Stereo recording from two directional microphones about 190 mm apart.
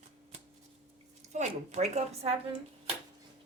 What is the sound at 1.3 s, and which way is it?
A woman's voice, 35° right (ahead or behind).